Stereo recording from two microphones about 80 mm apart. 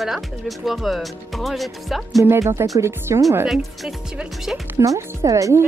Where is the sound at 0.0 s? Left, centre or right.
Centre.